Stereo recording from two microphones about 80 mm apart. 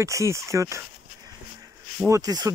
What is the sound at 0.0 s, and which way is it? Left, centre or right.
Speech, right.